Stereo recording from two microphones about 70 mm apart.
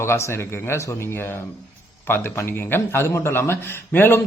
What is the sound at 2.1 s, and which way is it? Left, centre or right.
A man's voice, left.